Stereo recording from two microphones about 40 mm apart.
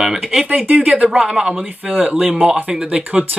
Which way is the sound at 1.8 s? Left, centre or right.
Right.